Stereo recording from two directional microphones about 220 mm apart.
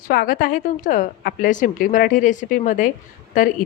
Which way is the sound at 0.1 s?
40° left (ahead or behind).